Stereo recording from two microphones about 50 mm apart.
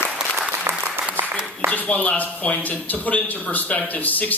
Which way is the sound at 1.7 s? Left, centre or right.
Left.